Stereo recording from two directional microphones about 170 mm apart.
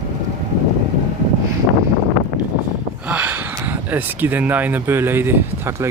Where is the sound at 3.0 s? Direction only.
10° right (ahead or behind).